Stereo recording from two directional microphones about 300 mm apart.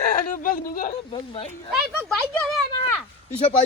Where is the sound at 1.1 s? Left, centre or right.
Centre.